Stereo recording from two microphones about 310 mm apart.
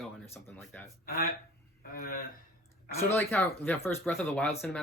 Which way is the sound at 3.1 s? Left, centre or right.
Centre.